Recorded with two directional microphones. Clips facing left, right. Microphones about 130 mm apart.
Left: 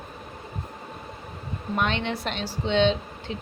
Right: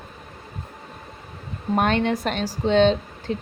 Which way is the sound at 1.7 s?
45° right (ahead or behind).